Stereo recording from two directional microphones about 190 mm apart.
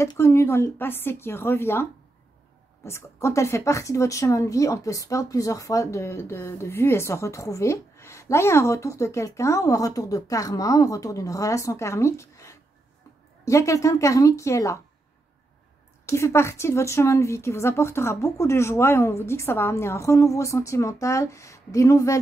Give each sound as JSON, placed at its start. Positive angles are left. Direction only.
{"t": 0.0, "sound": "speech", "side_deg": 15}
{"t": 16.1, "sound": "speech", "side_deg": 15}